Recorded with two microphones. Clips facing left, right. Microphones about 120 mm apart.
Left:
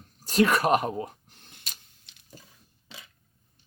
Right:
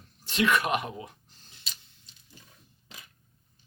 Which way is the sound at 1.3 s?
55° left (ahead or behind).